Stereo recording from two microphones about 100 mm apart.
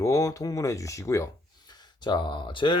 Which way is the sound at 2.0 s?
50° left (ahead or behind).